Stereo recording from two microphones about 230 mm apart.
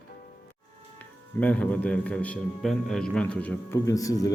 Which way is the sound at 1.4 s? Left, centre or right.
Centre.